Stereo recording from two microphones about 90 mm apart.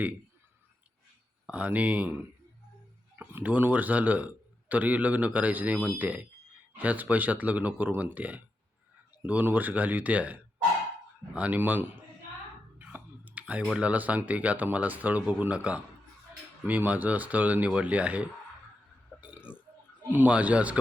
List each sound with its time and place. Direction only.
1.5 s speech: 15° right (ahead or behind)
12.8 s clicking: 15° right (ahead or behind)
13.7 s speech: 15° right (ahead or behind)
19.2 s burping: 15° right (ahead or behind)
20.1 s speech: 15° right (ahead or behind)